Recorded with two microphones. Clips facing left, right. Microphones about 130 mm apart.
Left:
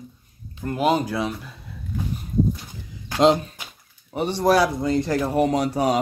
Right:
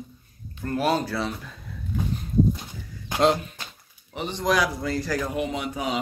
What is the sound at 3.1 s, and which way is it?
Speech, 20° left (ahead or behind).